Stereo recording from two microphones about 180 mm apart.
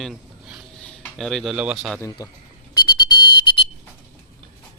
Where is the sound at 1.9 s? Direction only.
15° left (ahead or behind).